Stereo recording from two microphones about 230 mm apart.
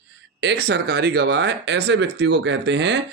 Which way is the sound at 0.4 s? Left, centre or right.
Right.